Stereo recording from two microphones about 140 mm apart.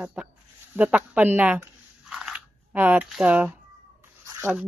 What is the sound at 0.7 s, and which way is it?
Biting, 10° right (ahead or behind).